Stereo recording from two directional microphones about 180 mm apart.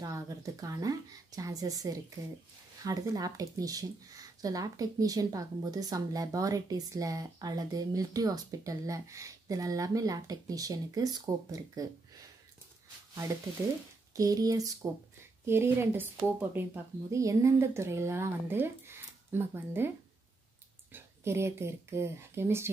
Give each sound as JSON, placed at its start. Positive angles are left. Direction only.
{"t": 0.0, "sound": "speech", "side_deg": -20}
{"t": 13.1, "sound": "speech", "side_deg": -20}
{"t": 20.9, "sound": "speech", "side_deg": -15}